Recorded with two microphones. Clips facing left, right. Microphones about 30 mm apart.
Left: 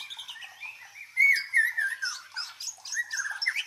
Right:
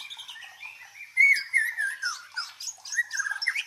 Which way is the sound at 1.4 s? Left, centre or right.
Centre.